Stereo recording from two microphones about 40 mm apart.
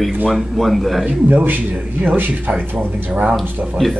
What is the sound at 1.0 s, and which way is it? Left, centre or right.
Speech, right.